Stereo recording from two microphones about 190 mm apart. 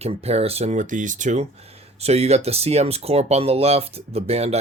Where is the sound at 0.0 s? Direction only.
35° right (ahead or behind).